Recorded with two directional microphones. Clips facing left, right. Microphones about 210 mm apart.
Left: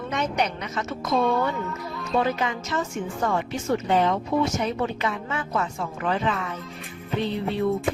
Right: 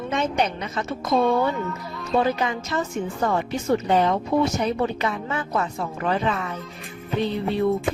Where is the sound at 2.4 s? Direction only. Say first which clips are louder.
Right 2 dB; 35° right (ahead or behind).